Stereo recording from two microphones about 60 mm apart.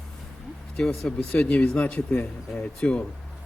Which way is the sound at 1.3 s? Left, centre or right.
Left.